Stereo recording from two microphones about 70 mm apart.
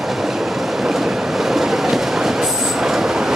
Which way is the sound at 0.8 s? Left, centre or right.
Centre.